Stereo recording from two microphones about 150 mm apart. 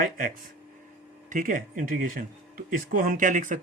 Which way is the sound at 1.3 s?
65° right (ahead or behind).